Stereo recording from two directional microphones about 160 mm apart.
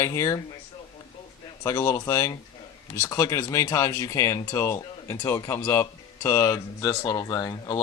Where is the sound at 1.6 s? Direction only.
20° left (ahead or behind).